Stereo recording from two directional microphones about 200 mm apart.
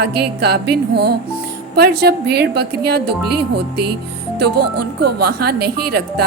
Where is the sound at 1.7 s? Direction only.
55° right (ahead or behind).